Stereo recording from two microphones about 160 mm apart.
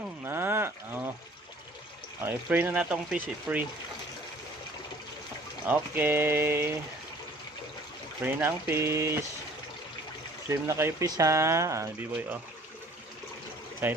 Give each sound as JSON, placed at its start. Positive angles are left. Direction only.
{"t": 0.3, "sound": "cattle", "side_deg": -15}
{"t": 2.2, "sound": "speech", "side_deg": -10}
{"t": 5.6, "sound": "speech", "side_deg": -10}
{"t": 8.2, "sound": "speech", "side_deg": -15}
{"t": 10.5, "sound": "speech", "side_deg": -15}
{"t": 13.8, "sound": "speech", "side_deg": -10}